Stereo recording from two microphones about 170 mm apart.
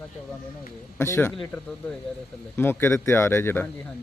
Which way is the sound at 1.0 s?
15° left (ahead or behind).